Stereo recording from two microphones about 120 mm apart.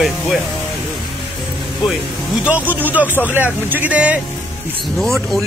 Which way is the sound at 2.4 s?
15° right (ahead or behind).